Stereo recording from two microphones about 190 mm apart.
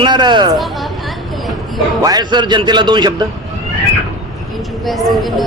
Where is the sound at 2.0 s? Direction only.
20° right (ahead or behind).